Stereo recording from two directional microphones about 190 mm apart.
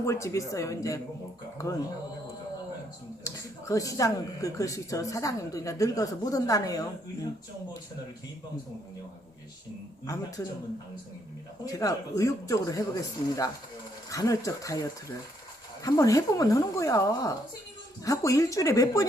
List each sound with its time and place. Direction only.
0.0 s speech: 15° left (ahead or behind)
3.2 s speech: 15° left (ahead or behind)
10.1 s speech: 15° left (ahead or behind)
11.6 s speech: 20° left (ahead or behind)